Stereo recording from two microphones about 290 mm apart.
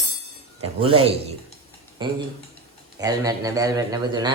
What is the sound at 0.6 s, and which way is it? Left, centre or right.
A man's voice, centre.